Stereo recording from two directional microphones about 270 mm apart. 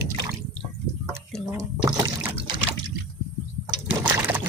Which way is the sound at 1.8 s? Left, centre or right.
Centre.